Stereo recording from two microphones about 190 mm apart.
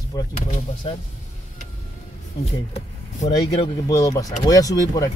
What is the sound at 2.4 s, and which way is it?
Speech, 35° left (ahead or behind).